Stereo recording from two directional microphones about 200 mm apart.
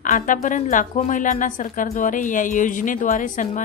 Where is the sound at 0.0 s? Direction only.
40° left (ahead or behind).